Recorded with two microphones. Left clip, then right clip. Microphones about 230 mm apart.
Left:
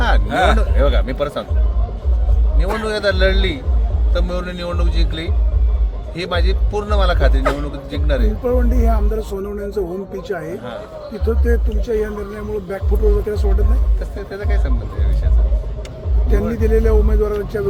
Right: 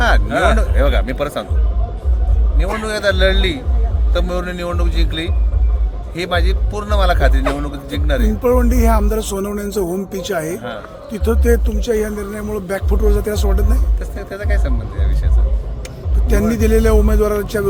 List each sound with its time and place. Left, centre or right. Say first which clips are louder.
0.3 s a man's voice: right 1 dB; centre
0.8 s speech: right 1 dB; centre
2.6 s a man's voice: even; centre
8.4 s speech: right 5 dB; right
14.2 s speech: right 2 dB; centre
16.6 s speech: right 2 dB; right